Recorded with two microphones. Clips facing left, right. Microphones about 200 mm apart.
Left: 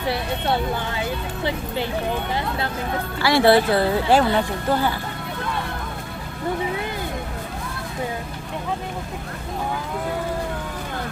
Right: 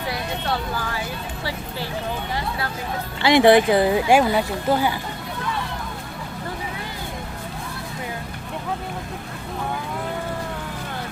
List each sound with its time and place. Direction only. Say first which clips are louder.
0.1 s speech: left 4 dB; 25° left (ahead or behind)
3.2 s speech: right 2 dB; 20° right (ahead or behind)